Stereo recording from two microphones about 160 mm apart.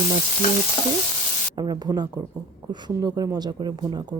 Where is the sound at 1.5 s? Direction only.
25° right (ahead or behind).